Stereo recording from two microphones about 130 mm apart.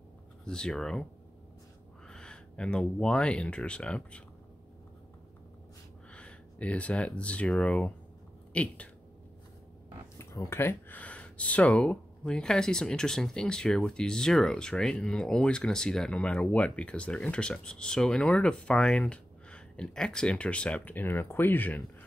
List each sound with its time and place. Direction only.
0.5 s speech: 5° left (ahead or behind)
2.0 s speech: 5° left (ahead or behind)
6.1 s speech: 10° left (ahead or behind)
10.1 s speech: 20° left (ahead or behind)